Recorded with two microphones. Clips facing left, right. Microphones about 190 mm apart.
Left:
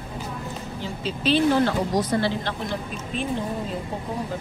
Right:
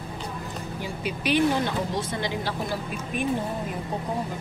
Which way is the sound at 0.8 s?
15° right (ahead or behind).